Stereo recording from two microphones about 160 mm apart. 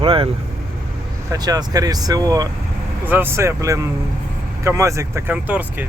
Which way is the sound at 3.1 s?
15° right (ahead or behind).